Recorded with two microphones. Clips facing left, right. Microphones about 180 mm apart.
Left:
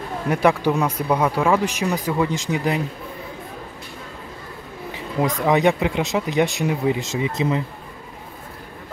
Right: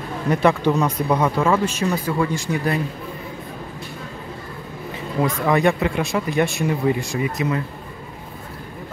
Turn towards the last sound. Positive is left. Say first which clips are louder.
# left 1 dB
turn(degrees=25)  # may be behind; listen again after turning